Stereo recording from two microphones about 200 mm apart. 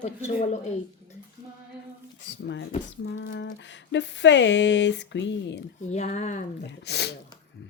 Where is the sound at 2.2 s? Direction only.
60° left (ahead or behind).